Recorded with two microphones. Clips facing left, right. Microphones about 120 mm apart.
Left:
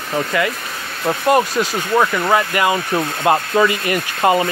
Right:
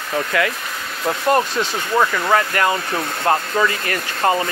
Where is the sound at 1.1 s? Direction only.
10° left (ahead or behind).